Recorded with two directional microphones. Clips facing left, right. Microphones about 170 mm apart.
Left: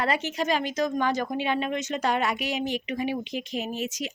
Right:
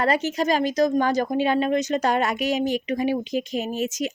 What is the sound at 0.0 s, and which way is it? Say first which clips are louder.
Speech: right 5 dB; 40° right (ahead or behind).